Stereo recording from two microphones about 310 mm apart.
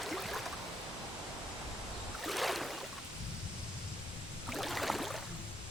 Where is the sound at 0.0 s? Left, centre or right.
Centre.